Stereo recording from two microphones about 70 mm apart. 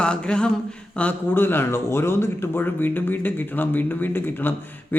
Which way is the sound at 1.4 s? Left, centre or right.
Left.